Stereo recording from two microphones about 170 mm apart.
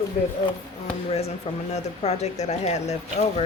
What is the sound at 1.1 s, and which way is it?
Speech, 35° left (ahead or behind).